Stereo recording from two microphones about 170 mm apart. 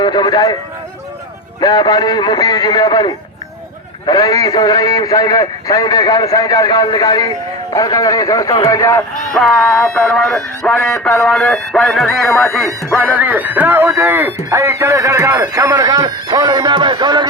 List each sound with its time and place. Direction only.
0.0 s a sound: 25° left (ahead or behind)
1.6 s a man's voice: 25° left (ahead or behind)
9.3 s speech: 5° left (ahead or behind)
12.6 s speech: 15° right (ahead or behind)